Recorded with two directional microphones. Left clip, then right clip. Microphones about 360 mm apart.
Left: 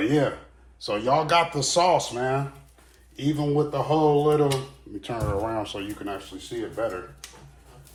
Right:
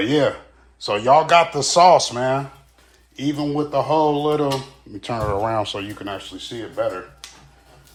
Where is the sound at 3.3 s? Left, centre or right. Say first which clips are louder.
Right 3 dB; centre.